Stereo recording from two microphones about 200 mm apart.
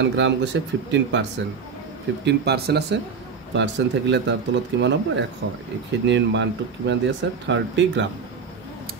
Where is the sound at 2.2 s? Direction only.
55° right (ahead or behind).